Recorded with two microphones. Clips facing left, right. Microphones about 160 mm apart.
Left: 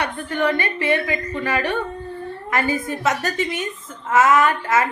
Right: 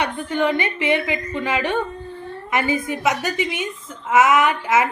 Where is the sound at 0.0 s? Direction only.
20° right (ahead or behind).